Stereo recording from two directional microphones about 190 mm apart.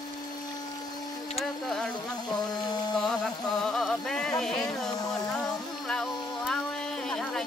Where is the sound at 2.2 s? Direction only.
20° left (ahead or behind).